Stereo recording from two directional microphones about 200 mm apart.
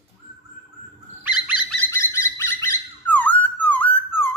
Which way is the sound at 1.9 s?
15° left (ahead or behind).